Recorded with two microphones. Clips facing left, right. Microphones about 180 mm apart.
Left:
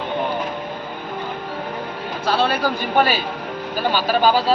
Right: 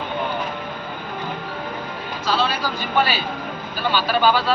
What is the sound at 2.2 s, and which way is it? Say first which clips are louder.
Speech: left 3 dB; 55° left (ahead or behind).